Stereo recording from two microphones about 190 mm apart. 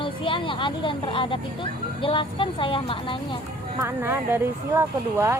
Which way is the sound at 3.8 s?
10° right (ahead or behind).